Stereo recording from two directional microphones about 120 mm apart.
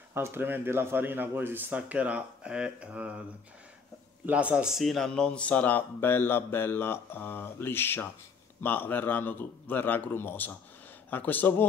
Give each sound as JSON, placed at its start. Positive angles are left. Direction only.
{"t": 0.1, "sound": "speech", "side_deg": -20}
{"t": 4.3, "sound": "speech", "side_deg": -10}